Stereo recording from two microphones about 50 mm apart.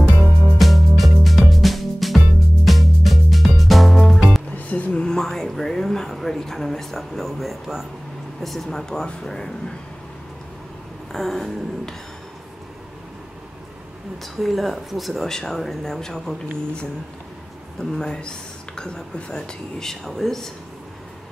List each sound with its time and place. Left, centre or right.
0.6 s music: centre
4.6 s a sound: left
5.2 s a sound: centre
8.4 s speech: centre
11.1 s speech: centre
14.2 s speech: centre